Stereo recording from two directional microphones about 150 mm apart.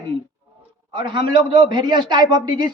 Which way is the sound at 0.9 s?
30° right (ahead or behind).